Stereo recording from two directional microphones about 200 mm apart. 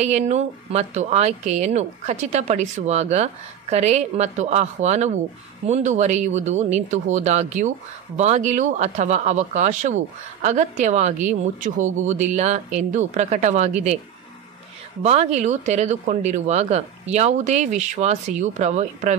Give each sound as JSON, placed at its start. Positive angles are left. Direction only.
{"t": 0.0, "sound": "speech", "side_deg": -35}
{"t": 15.0, "sound": "speech", "side_deg": -35}